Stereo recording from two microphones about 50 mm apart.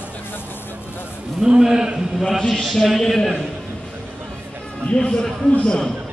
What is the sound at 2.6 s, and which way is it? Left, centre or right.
Speech, centre.